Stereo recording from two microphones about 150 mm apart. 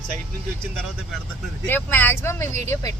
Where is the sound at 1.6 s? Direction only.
15° left (ahead or behind).